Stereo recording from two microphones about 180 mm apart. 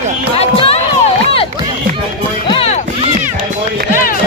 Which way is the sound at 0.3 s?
35° left (ahead or behind).